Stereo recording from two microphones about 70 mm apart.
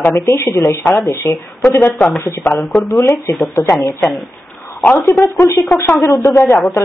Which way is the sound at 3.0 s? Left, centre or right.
Left.